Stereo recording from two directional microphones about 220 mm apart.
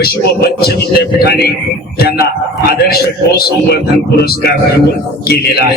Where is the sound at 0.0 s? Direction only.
45° left (ahead or behind).